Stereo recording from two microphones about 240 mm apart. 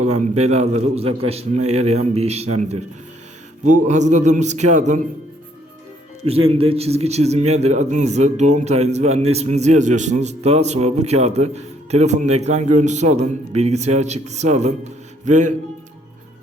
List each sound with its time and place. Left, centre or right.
0.0 s a man's voice: right
6.2 s a man's voice: right